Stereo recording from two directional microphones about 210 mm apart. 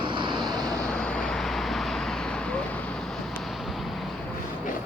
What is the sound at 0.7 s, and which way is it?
Vehicle, 5° left (ahead or behind).